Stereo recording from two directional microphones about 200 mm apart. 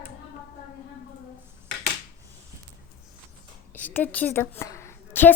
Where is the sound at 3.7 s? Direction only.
10° left (ahead or behind).